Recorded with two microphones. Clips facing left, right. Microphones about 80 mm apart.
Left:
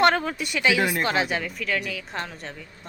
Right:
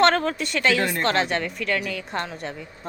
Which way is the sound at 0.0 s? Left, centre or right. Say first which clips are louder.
Right 1 dB; centre.